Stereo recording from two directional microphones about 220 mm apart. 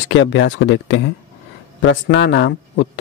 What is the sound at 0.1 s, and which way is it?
Speech, 60° left (ahead or behind).